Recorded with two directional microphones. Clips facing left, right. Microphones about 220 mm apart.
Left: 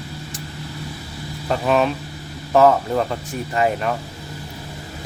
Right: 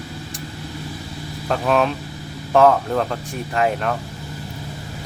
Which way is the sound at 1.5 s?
Centre (ahead or behind).